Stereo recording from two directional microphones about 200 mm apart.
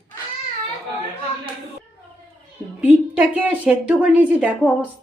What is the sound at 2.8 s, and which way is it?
A woman's voice, 10° right (ahead or behind).